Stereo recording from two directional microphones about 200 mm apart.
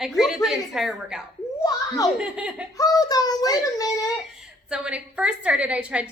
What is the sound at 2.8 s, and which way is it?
A child's voice, 15° left (ahead or behind).